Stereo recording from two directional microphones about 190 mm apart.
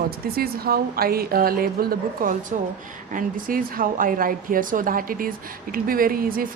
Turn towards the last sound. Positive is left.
turn(degrees=-50)  # may be behind; listen again after turning